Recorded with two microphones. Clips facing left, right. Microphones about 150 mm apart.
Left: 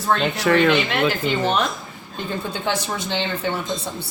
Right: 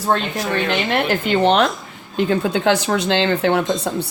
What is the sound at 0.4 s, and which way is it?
Speech, 90° left.